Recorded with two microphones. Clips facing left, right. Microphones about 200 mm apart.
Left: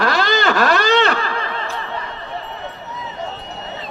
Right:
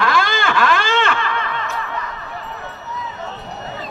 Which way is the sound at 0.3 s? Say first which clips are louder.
Left 2 dB; 40° left (ahead or behind).